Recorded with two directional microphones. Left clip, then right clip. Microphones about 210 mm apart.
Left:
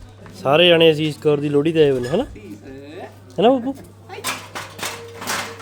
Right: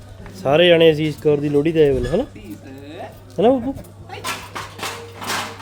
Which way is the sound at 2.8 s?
5° left (ahead or behind).